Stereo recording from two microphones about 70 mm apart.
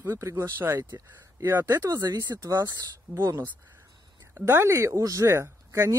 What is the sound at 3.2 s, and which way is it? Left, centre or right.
Speech, right.